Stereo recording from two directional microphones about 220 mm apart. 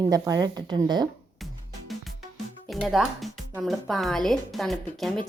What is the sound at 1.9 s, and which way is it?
Music, centre (ahead or behind).